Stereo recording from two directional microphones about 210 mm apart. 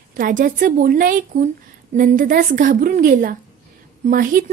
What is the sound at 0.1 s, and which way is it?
A woman's voice, 40° right (ahead or behind).